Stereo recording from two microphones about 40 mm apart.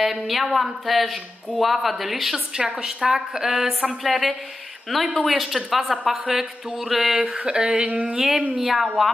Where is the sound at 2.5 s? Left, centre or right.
Right; by 7.1 s centre.